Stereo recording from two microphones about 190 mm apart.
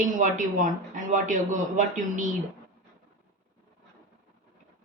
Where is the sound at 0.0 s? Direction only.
40° right (ahead or behind).